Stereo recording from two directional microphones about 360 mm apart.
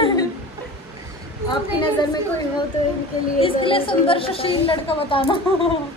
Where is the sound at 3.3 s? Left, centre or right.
Centre.